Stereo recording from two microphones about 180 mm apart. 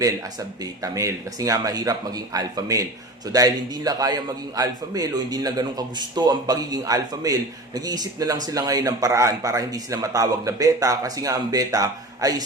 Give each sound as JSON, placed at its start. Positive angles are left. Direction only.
{"t": 0.0, "sound": "a man's voice", "side_deg": -20}